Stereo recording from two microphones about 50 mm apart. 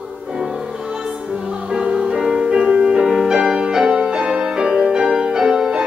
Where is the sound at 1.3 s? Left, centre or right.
Centre.